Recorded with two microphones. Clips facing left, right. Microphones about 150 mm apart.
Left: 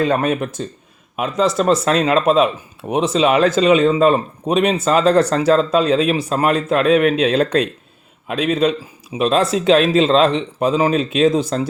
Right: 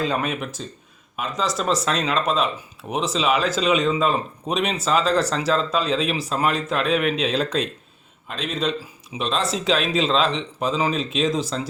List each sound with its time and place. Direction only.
0.0 s speech: 55° left (ahead or behind)